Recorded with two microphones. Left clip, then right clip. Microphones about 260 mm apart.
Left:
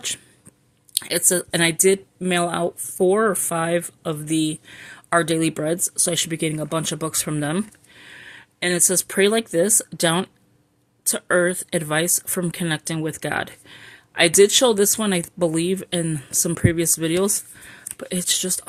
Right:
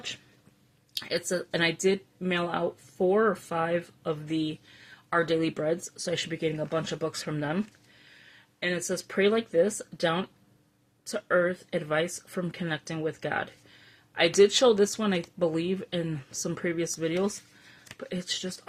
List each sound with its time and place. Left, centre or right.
0.9 s speech: left